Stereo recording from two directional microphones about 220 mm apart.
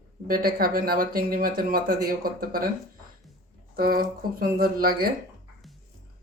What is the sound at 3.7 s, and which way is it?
A man's voice, 40° right (ahead or behind).